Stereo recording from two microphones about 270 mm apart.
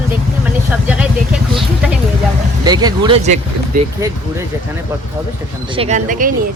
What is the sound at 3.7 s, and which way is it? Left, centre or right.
Speech, right.